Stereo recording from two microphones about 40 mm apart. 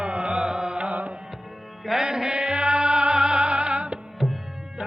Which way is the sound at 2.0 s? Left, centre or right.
Centre.